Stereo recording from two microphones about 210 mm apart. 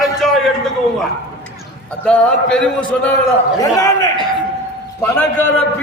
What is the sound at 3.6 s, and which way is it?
A man's voice, 15° left (ahead or behind).